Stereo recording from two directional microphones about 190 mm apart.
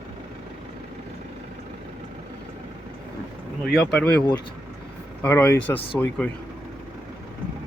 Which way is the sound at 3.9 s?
10° left (ahead or behind).